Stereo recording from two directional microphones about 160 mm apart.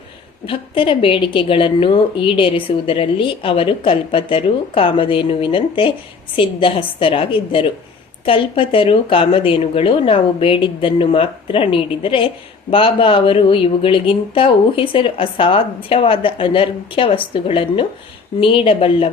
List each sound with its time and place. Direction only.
0.4 s a woman's voice: 35° left (ahead or behind)